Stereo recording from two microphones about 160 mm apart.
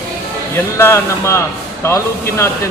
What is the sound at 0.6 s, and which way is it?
Speech, 15° left (ahead or behind).